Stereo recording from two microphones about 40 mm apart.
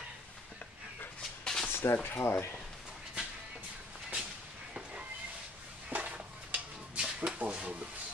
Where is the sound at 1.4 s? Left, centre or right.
Centre.